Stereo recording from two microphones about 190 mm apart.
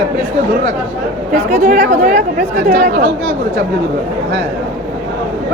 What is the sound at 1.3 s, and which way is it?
Speech, 40° right (ahead or behind).